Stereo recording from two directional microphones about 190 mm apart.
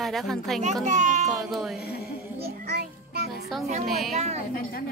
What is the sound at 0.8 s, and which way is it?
Music, 40° right (ahead or behind).